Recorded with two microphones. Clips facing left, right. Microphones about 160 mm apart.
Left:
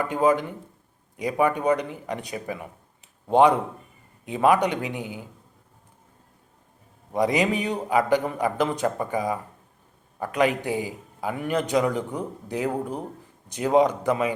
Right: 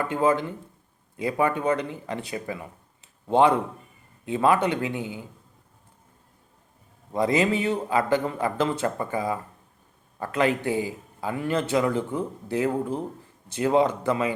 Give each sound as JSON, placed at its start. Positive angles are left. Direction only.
{"t": 0.0, "sound": "a man's voice", "side_deg": 15}
{"t": 7.1, "sound": "a man's voice", "side_deg": 15}